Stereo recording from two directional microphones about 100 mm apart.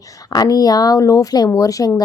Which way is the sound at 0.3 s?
40° left (ahead or behind).